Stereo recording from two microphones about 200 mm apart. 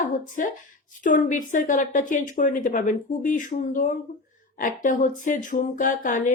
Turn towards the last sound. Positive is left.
turn(degrees=40)  # may be behind; listen again after turning